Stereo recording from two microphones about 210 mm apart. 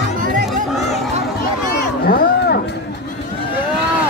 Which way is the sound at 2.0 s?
45° left (ahead or behind).